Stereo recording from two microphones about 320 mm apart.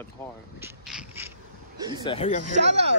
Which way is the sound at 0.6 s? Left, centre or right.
Centre.